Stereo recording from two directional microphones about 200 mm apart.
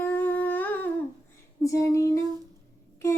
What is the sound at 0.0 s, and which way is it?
Humming, 10° left (ahead or behind).